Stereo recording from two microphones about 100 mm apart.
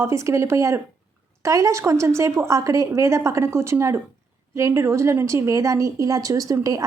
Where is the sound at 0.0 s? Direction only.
30° right (ahead or behind).